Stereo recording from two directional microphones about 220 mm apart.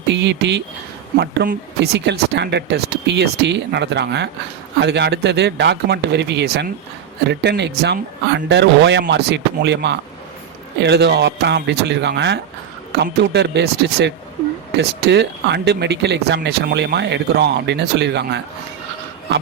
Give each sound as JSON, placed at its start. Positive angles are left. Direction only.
{"t": 0.1, "sound": "speech", "side_deg": -50}